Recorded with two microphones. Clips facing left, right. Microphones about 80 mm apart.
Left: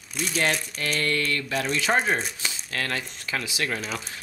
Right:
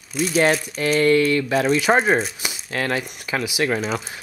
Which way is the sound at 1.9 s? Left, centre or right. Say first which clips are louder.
Right 5 dB; right.